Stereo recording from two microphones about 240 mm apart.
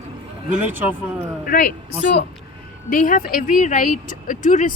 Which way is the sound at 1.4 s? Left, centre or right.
Left.